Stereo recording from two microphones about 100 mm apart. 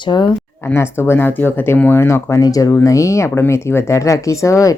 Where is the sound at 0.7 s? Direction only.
25° left (ahead or behind).